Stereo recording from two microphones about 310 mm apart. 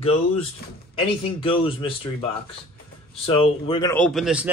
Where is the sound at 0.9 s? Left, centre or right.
Centre.